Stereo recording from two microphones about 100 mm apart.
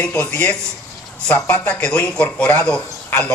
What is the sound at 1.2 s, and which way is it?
Speech, 20° left (ahead or behind).